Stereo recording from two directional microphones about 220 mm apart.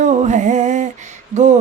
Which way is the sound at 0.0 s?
35° right (ahead or behind).